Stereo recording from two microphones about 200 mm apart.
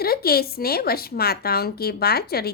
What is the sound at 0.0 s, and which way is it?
A woman's voice, 50° left (ahead or behind).